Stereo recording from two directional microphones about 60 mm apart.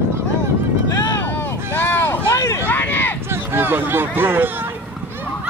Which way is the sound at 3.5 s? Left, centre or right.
Right.